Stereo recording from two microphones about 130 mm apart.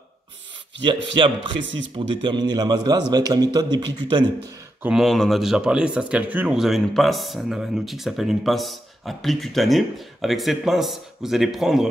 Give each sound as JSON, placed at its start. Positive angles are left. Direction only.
{"t": 0.8, "sound": "speech", "side_deg": -40}
{"t": 4.8, "sound": "speech", "side_deg": 0}